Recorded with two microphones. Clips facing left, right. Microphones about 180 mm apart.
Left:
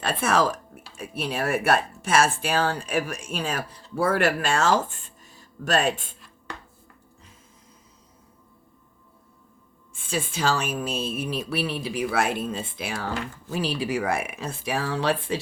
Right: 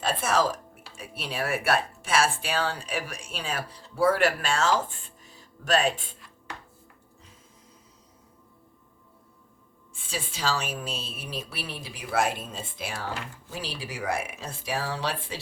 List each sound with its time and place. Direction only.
0.0 s speech: 60° left (ahead or behind)
0.9 s speech: 45° left (ahead or behind)
9.9 s speech: 50° left (ahead or behind)